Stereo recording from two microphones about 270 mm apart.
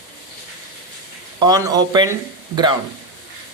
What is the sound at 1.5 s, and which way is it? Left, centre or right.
Speech, centre.